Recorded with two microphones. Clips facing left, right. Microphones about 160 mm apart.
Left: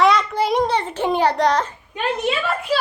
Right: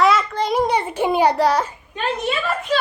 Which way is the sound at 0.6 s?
10° right (ahead or behind).